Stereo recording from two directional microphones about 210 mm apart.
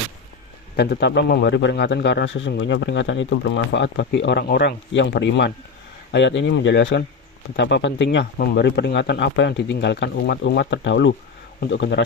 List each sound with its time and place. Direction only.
0.8 s a man's voice: 55° left (ahead or behind)